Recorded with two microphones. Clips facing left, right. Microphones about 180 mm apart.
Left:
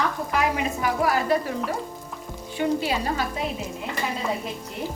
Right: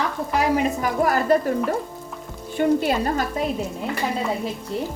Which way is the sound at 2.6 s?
50° right (ahead or behind).